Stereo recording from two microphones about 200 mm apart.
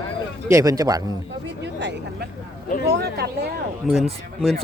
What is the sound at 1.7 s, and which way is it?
Speech, 60° right (ahead or behind).